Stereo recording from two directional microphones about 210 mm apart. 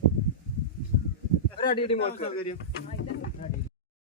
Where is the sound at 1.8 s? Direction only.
30° left (ahead or behind).